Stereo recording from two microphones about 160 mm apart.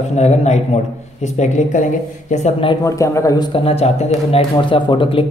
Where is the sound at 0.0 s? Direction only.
45° left (ahead or behind).